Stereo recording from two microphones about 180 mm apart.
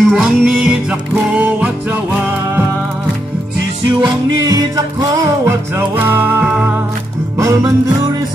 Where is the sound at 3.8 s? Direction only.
20° right (ahead or behind).